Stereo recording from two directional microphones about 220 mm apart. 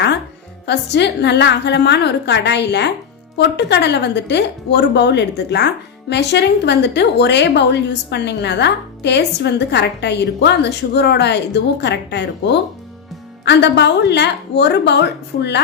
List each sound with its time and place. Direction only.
0.6 s speech: 50° left (ahead or behind)